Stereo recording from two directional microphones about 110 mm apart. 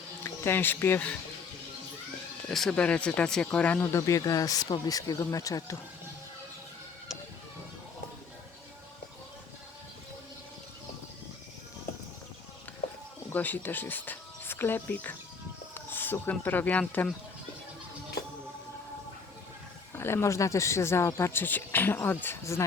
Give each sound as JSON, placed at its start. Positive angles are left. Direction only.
{"t": 0.2, "sound": "speech", "side_deg": 20}
{"t": 2.5, "sound": "speech", "side_deg": 5}
{"t": 3.9, "sound": "speech", "side_deg": 30}
{"t": 13.3, "sound": "speech", "side_deg": 15}
{"t": 19.9, "sound": "speech", "side_deg": 20}